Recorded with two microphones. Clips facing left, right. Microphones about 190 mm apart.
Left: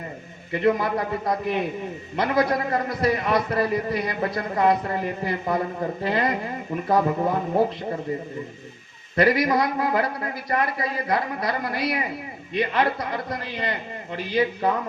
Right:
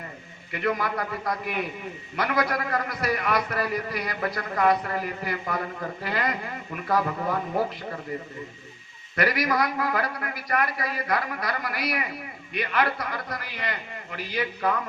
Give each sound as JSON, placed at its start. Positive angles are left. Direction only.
{"t": 0.5, "sound": "a man's voice", "side_deg": 25}
{"t": 9.1, "sound": "a man's voice", "side_deg": 25}